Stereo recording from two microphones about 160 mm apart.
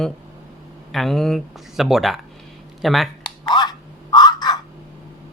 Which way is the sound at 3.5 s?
25° left (ahead or behind).